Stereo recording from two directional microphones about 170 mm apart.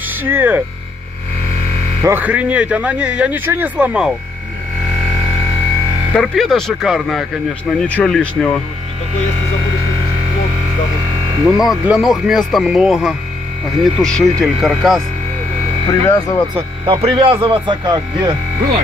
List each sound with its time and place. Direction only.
0.1 s speech: 10° right (ahead or behind)
2.0 s speech: 10° right (ahead or behind)
6.1 s speech: centre (ahead or behind)
11.4 s speech: centre (ahead or behind)
15.9 s speech: 20° left (ahead or behind)
16.5 s speech: 30° right (ahead or behind)